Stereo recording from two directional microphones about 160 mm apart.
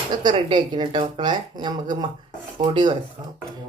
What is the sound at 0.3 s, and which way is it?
Speech, 30° right (ahead or behind).